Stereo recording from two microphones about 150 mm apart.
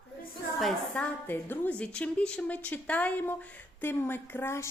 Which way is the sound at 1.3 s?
10° left (ahead or behind).